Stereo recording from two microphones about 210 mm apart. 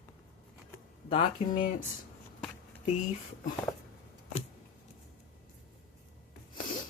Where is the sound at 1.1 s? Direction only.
35° left (ahead or behind).